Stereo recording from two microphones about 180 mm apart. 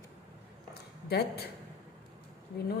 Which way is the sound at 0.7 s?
60° left (ahead or behind).